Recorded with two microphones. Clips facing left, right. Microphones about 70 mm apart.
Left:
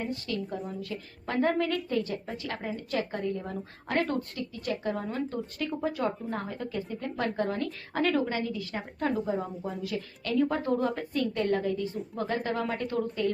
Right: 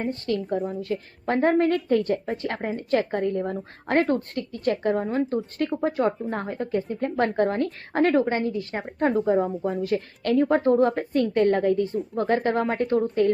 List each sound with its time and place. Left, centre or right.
0.0 s a woman's voice: right
3.5 s a woman's voice: right